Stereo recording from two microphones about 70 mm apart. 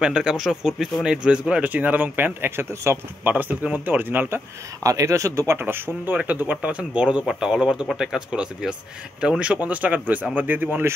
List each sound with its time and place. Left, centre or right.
0.0 s speech: centre; by 3.0 s right
3.3 s speech: right
4.8 s speech: right
5.5 s speech: right